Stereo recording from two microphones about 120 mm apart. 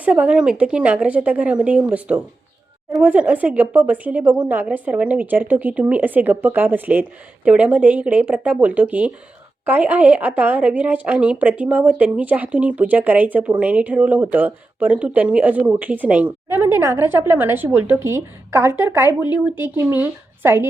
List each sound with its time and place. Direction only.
0.0 s a woman's voice: 10° right (ahead or behind)